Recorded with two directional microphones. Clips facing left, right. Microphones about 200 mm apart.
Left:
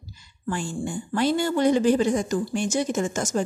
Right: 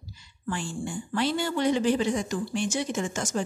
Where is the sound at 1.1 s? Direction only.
45° left (ahead or behind).